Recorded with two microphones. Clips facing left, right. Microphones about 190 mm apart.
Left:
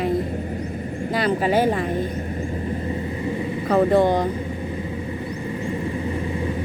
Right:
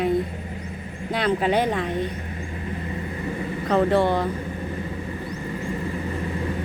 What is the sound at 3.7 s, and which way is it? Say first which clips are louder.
Speech: left 3 dB; 10° left (ahead or behind).